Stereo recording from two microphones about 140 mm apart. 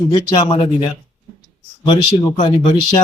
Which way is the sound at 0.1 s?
30° left (ahead or behind).